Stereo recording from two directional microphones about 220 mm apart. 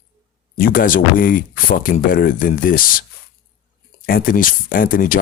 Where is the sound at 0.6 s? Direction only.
40° left (ahead or behind).